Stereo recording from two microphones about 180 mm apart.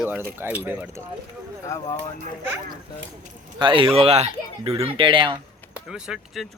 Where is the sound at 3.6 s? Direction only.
30° right (ahead or behind).